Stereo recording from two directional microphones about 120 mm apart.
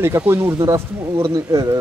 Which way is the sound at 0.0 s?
20° right (ahead or behind).